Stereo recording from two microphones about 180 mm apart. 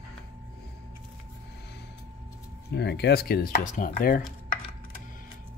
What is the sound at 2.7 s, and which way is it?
Speech, 70° left (ahead or behind).